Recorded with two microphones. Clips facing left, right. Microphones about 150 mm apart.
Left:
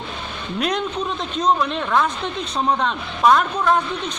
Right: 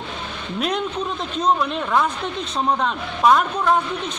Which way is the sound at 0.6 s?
5° right (ahead or behind).